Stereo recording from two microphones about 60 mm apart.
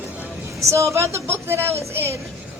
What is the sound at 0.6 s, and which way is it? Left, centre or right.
A woman's voice, right.